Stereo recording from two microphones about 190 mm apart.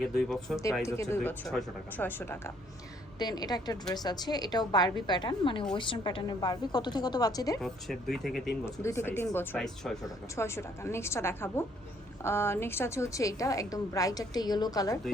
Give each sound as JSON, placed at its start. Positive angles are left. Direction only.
{"t": 0.0, "sound": "speech", "side_deg": 0}
{"t": 0.6, "sound": "a woman's voice", "side_deg": 15}
{"t": 3.2, "sound": "a woman's voice", "side_deg": 20}
{"t": 7.6, "sound": "speech", "side_deg": 0}
{"t": 8.6, "sound": "a woman's voice", "side_deg": 15}
{"t": 10.3, "sound": "a woman's voice", "side_deg": 15}